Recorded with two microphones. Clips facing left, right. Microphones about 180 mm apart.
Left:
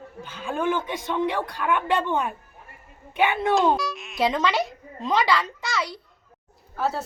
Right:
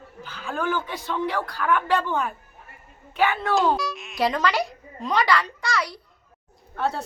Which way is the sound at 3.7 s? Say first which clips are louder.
Left 1 dB; centre (ahead or behind).